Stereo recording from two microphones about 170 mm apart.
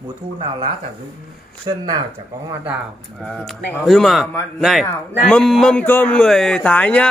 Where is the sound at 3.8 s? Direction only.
Centre (ahead or behind).